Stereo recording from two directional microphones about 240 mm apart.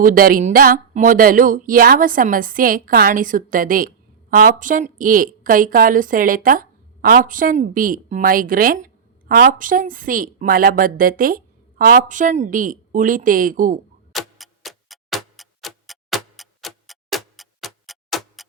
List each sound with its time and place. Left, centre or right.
0.0 s speech: right
14.1 s tick-tock: centre